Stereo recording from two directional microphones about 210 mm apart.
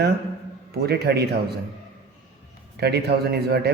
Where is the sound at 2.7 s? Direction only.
50° right (ahead or behind).